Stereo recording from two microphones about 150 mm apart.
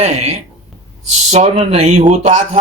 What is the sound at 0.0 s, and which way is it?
Speech, 45° right (ahead or behind).